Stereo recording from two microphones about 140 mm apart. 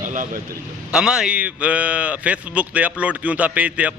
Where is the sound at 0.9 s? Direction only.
5° right (ahead or behind).